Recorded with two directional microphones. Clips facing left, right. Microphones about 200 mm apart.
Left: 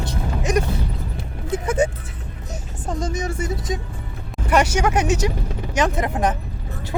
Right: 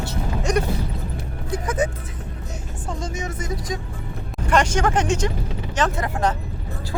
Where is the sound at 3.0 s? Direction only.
35° left (ahead or behind).